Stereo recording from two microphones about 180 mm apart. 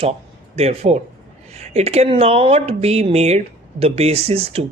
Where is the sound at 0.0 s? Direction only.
35° right (ahead or behind).